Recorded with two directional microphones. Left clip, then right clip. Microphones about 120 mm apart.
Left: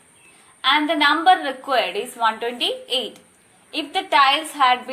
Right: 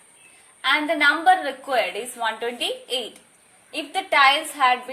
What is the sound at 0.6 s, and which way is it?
A woman's voice, 40° right (ahead or behind).